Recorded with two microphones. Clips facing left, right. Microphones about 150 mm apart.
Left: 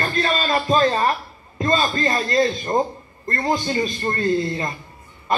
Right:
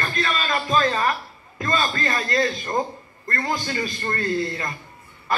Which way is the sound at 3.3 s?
25° left (ahead or behind).